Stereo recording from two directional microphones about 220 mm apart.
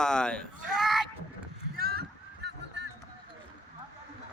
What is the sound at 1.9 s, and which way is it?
Honk, 50° right (ahead or behind).